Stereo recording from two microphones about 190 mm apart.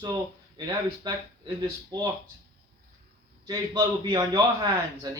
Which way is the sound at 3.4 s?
20° right (ahead or behind).